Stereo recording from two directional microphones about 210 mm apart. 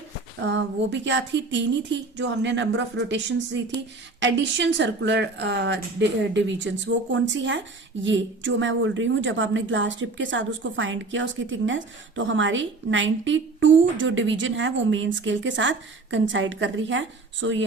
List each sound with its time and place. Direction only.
0.4 s a woman's voice: 60° right (ahead or behind)